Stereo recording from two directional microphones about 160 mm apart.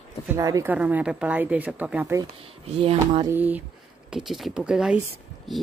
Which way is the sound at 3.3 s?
10° right (ahead or behind).